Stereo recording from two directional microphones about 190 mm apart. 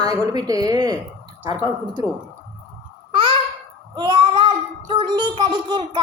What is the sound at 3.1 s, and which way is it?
Babbling, 25° right (ahead or behind).